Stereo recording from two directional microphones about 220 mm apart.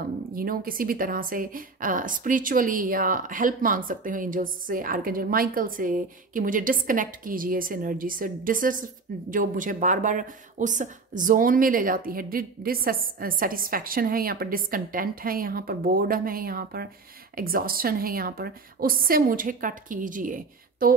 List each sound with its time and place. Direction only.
0.3 s a woman's voice: 40° right (ahead or behind)